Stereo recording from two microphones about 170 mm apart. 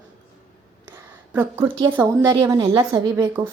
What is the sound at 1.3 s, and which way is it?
A woman's voice, 15° right (ahead or behind).